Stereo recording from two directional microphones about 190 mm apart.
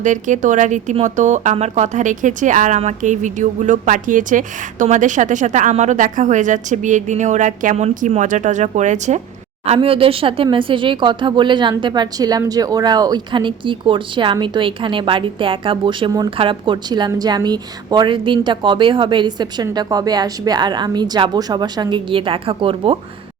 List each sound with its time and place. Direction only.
0.0 s speech: 40° right (ahead or behind)